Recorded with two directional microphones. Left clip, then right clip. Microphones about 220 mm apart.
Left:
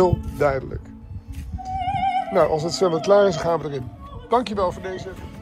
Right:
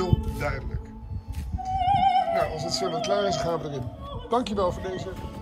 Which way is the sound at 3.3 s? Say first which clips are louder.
Left 5 dB; 10° right (ahead or behind).